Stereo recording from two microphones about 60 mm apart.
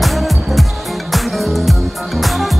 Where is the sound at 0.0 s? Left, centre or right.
Centre.